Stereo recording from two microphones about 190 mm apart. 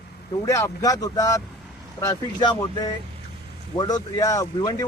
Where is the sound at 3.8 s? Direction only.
20° left (ahead or behind).